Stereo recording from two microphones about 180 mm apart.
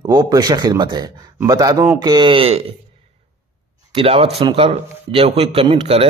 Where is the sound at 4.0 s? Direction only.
30° right (ahead or behind).